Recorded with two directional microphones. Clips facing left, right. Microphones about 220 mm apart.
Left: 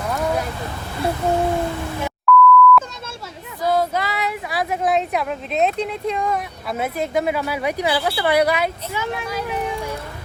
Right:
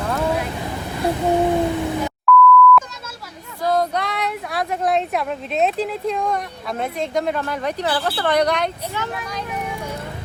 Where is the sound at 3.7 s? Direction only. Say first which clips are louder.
Right 1 dB; centre (ahead or behind).